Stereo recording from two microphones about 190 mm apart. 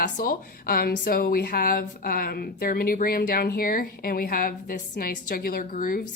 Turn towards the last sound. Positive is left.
turn(degrees=45)  # may be behind; listen again after turning